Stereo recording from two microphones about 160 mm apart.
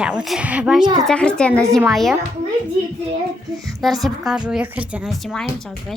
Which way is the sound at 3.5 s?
20° right (ahead or behind).